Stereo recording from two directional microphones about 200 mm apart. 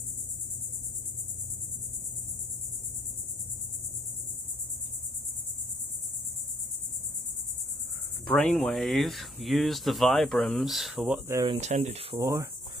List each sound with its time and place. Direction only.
8.3 s speech: 5° left (ahead or behind)
11.4 s speech: 30° right (ahead or behind)
12.2 s cricket: 15° right (ahead or behind)